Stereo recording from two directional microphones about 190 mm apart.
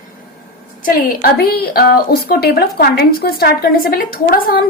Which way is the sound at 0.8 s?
50° left (ahead or behind).